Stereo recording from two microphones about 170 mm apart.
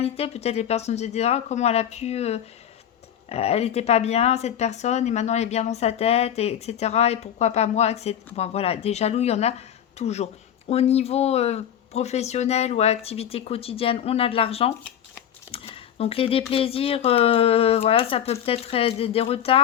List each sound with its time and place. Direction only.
0.0 s speech: 35° left (ahead or behind)